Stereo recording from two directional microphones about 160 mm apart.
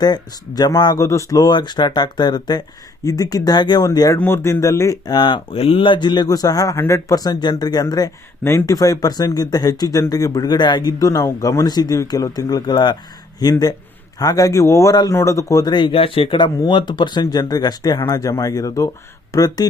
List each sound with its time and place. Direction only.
0.0 s speech: 25° left (ahead or behind)